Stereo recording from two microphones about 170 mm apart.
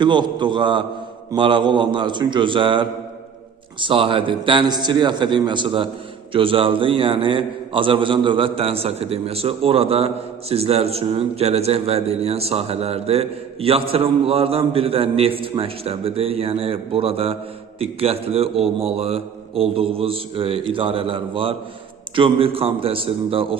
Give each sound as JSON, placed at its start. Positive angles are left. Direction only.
{"t": 0.0, "sound": "a man's voice", "side_deg": -25}